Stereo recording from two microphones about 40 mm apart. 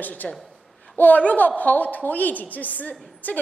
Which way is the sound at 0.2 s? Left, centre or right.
Centre.